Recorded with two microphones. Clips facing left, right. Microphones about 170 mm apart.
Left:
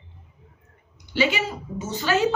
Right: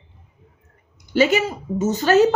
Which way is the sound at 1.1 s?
45° right (ahead or behind).